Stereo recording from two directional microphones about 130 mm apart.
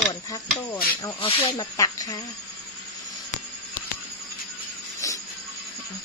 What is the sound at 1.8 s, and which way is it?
Speech, 25° left (ahead or behind).